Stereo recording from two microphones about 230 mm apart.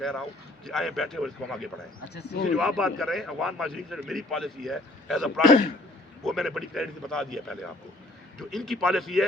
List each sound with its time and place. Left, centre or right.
0.0 s a man's voice: centre
2.1 s speech: left
2.6 s a man's voice: centre